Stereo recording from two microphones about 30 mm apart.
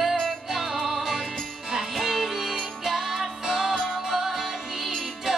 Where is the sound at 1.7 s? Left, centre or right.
Centre.